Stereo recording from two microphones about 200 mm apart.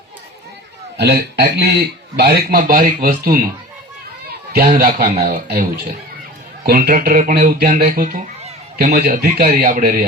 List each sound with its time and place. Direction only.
0.9 s a man's voice: 55° right (ahead or behind)